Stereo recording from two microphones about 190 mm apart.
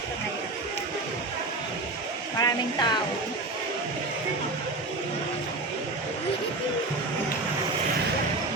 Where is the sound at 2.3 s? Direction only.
20° left (ahead or behind).